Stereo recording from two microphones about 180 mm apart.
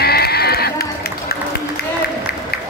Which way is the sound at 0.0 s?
60° left (ahead or behind).